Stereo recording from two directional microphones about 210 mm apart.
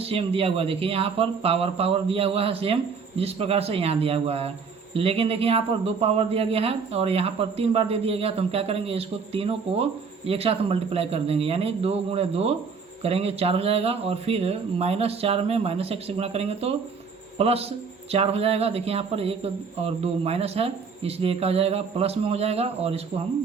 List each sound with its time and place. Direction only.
0.0 s speech: 25° right (ahead or behind)